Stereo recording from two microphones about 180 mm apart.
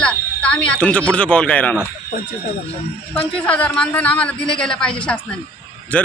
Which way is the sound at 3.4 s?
5° left (ahead or behind).